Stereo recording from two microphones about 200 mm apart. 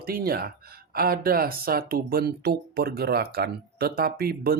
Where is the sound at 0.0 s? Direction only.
50° right (ahead or behind).